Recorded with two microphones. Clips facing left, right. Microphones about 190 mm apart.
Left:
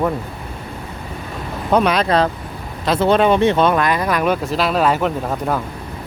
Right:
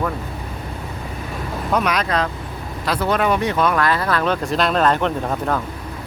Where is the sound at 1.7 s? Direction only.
30° left (ahead or behind); by 4.3 s 15° left (ahead or behind).